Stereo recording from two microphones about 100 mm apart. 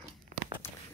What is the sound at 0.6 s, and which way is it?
Walk, 25° left (ahead or behind).